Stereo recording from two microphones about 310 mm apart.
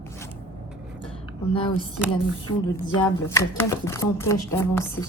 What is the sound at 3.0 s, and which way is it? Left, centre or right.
Speech, centre.